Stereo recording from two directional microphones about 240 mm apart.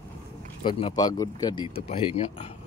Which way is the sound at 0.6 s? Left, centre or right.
Left.